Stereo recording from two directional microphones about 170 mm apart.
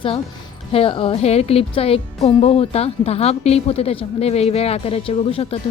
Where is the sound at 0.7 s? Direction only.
35° left (ahead or behind).